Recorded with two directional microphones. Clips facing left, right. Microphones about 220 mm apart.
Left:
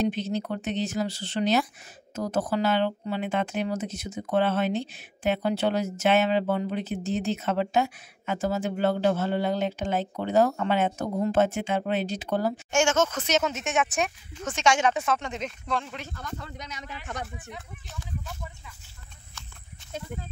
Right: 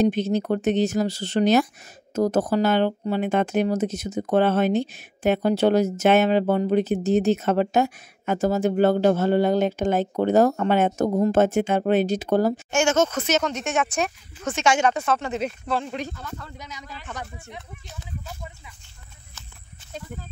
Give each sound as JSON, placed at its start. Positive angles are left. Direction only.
{"t": 0.0, "sound": "speech", "side_deg": -45}
{"t": 13.3, "sound": "speech", "side_deg": 5}